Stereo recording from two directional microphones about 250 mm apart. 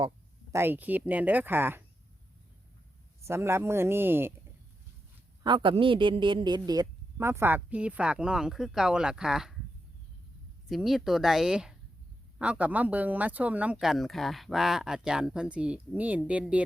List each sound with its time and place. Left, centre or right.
0.5 s speech: centre
3.2 s speech: centre
5.4 s a man's voice: centre
10.7 s speech: centre